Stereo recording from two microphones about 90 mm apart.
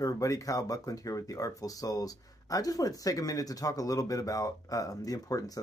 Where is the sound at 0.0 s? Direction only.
40° left (ahead or behind).